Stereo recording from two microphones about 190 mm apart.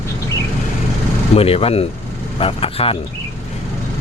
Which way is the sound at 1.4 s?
30° left (ahead or behind).